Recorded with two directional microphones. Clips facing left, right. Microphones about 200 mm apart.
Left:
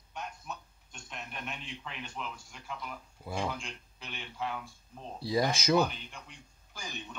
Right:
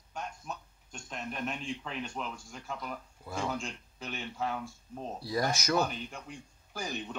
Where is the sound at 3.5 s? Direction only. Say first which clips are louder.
Right 4 dB; 45° right (ahead or behind).